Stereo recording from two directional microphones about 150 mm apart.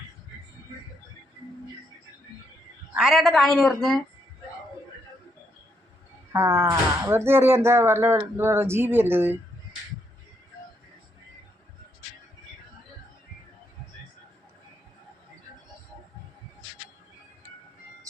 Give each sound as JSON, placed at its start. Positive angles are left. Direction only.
{"t": 2.9, "sound": "a woman's voice", "side_deg": -5}
{"t": 6.3, "sound": "speech", "side_deg": -20}